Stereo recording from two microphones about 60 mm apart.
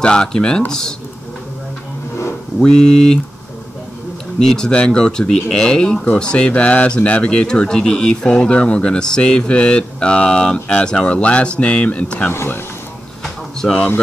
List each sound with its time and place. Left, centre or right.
0.0 s speech: centre
2.6 s speech: centre
4.4 s speech: centre
12.3 s speech: left
13.2 s a sound: centre